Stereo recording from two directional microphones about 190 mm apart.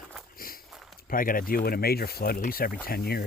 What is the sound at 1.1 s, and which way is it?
Speech, 45° left (ahead or behind).